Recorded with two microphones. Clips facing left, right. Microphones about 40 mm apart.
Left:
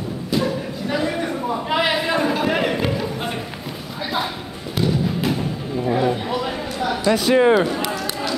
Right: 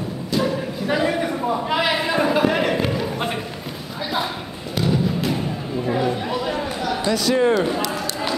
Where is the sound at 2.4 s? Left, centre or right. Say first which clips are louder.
Right 1 dB; centre.